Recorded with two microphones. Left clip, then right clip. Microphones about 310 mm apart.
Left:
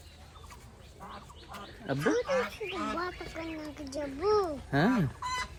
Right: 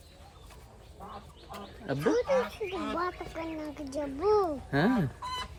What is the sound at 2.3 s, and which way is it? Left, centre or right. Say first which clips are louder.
Speech: right 2 dB; right.